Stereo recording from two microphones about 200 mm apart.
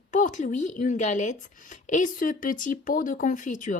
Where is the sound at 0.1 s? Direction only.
40° left (ahead or behind).